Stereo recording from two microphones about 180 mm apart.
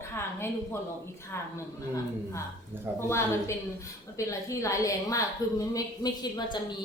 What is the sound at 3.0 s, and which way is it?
A woman's voice, 15° left (ahead or behind).